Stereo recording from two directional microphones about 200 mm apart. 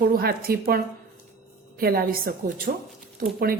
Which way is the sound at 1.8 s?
50° right (ahead or behind).